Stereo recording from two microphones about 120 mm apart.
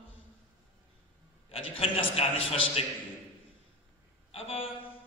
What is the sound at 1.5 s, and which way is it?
A man's voice, 50° left (ahead or behind).